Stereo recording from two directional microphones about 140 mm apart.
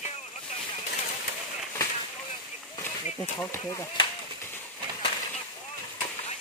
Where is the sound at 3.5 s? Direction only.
25° left (ahead or behind).